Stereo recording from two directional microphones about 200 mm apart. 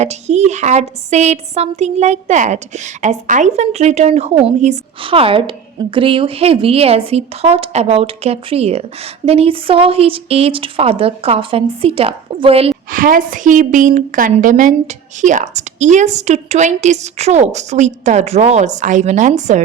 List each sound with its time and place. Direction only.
0.0 s a woman's voice: 35° right (ahead or behind)
12.9 s a woman's voice: 45° right (ahead or behind)